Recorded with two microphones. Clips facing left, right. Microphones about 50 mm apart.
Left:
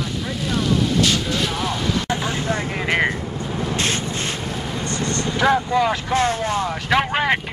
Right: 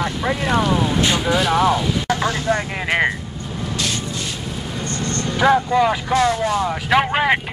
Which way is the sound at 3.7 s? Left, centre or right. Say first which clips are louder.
Left 1 dB; left.